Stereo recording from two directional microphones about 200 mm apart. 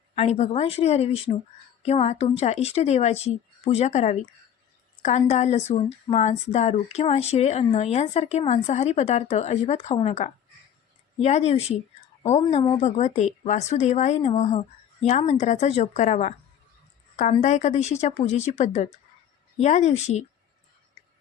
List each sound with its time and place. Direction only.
0.2 s speech: 35° left (ahead or behind)
17.4 s speech: 35° left (ahead or behind)